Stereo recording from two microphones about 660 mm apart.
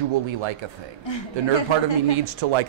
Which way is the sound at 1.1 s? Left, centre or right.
Left.